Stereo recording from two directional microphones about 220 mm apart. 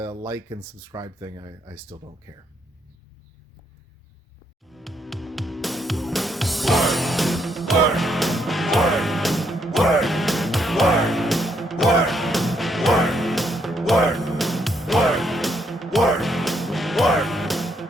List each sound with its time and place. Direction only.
0.0 s speech: 15° right (ahead or behind)
4.7 s music: centre (ahead or behind)